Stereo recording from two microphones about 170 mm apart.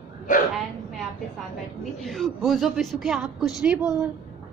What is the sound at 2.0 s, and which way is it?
A woman's voice, centre (ahead or behind).